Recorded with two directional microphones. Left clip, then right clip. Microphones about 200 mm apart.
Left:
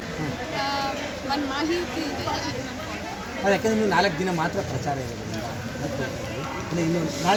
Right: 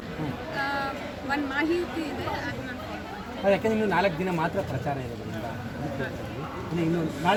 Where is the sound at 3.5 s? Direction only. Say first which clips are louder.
Left 2 dB; 20° right (ahead or behind).